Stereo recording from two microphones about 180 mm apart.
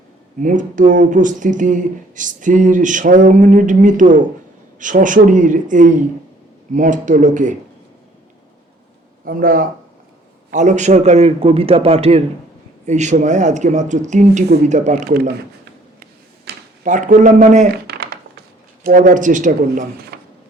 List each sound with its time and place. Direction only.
0.3 s speech: 45° right (ahead or behind)
9.2 s a man's voice: 50° right (ahead or behind)
15.1 s speech: 60° right (ahead or behind)
16.5 s a sound: 65° right (ahead or behind)
16.8 s a man's voice: 45° right (ahead or behind)
17.8 s typing: 60° right (ahead or behind)
18.8 s speech: 50° right (ahead or behind)